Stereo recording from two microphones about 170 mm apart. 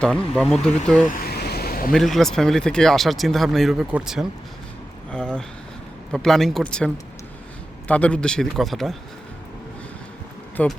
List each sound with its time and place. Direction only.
0.0 s speech: 5° left (ahead or behind)
1.0 s vehicle: 55° left (ahead or behind)
1.9 s speech: centre (ahead or behind)
10.6 s speech: 10° left (ahead or behind)